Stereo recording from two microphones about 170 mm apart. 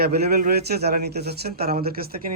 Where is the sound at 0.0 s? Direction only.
70° right (ahead or behind).